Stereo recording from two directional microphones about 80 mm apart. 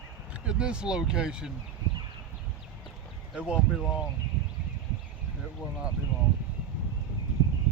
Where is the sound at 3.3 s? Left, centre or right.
Centre.